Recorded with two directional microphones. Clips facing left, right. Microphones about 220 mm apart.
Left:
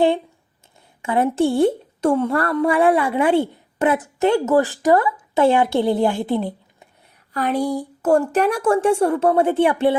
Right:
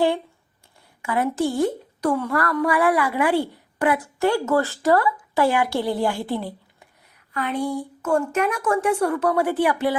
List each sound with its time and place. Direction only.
1.0 s speech: 25° left (ahead or behind)
7.3 s speech: 40° left (ahead or behind)